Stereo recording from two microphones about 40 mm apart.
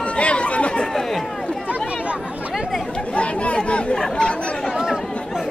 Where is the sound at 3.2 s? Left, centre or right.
Left.